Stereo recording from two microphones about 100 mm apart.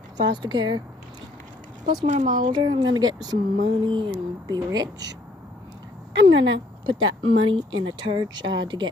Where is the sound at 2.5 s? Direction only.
50° right (ahead or behind).